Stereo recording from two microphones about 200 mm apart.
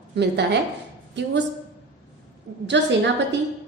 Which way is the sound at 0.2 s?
60° right (ahead or behind).